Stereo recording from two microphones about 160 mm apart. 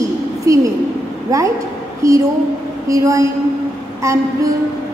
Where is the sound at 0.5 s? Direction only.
20° right (ahead or behind).